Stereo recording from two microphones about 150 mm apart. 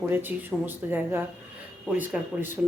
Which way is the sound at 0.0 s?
15° right (ahead or behind).